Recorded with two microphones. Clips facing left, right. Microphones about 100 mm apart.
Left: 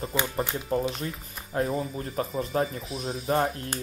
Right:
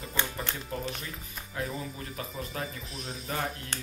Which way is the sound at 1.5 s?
40° left (ahead or behind).